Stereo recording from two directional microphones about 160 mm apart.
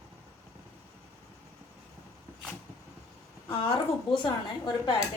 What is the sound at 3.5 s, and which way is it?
A woman's voice, 30° left (ahead or behind).